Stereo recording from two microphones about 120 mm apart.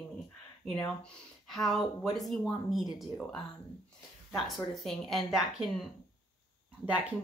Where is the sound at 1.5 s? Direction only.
5° left (ahead or behind).